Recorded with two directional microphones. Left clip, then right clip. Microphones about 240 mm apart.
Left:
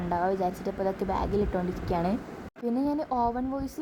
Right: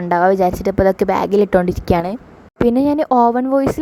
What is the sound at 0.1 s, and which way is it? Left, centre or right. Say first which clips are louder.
Speech: right 14 dB; right.